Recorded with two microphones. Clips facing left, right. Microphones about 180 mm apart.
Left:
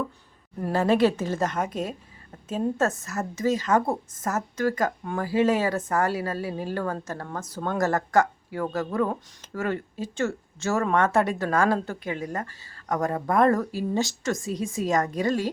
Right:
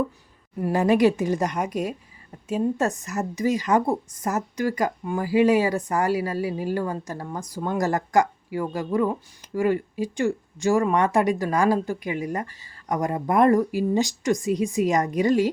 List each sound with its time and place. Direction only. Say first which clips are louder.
0.6 s speech: right 2 dB; 15° right (ahead or behind)